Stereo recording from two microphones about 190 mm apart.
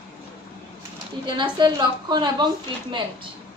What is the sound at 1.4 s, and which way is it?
A woman's voice, 25° right (ahead or behind).